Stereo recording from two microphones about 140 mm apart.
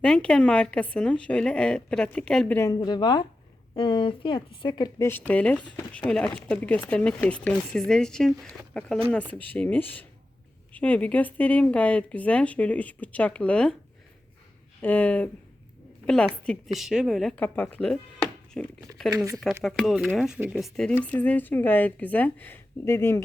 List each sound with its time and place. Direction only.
0.0 s speech: 5° left (ahead or behind)
2.6 s speech: 25° left (ahead or behind)
5.0 s a woman's voice: 15° left (ahead or behind)
14.8 s a woman's voice: 10° left (ahead or behind)
19.1 s speech: 25° right (ahead or behind)
19.4 s a woman's voice: centre (ahead or behind); by 23.2 s 20° left (ahead or behind)